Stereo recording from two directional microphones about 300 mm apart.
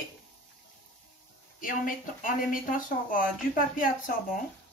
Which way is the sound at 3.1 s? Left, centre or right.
Left.